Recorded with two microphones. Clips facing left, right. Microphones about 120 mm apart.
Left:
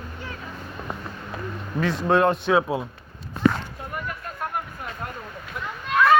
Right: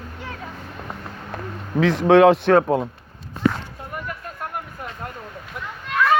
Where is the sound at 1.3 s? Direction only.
80° right.